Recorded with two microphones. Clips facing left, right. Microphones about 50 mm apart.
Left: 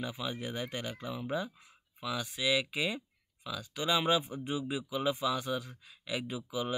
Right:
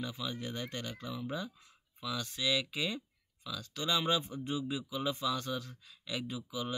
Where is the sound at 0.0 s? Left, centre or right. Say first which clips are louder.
Left 2 dB; centre.